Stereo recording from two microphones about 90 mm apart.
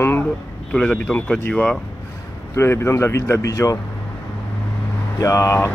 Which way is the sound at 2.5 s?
30° left (ahead or behind).